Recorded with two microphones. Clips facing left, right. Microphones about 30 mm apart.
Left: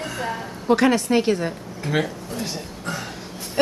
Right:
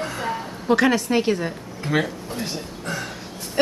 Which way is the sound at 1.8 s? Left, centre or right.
Centre.